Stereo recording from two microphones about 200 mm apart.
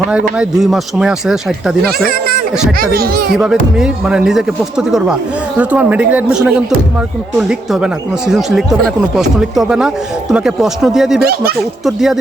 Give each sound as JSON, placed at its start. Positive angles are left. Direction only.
{"t": 0.1, "sound": "speech", "side_deg": -5}
{"t": 2.0, "sound": "a child's voice", "side_deg": -50}
{"t": 3.3, "sound": "speech", "side_deg": -5}
{"t": 11.2, "sound": "a child's voice", "side_deg": -50}
{"t": 11.9, "sound": "speech", "side_deg": 0}